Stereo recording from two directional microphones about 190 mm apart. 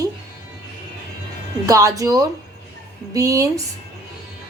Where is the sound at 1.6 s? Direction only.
15° right (ahead or behind).